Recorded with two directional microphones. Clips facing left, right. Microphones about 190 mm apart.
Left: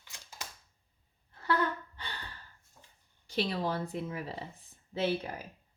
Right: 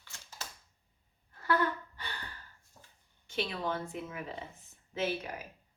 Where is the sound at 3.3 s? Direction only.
35° left (ahead or behind).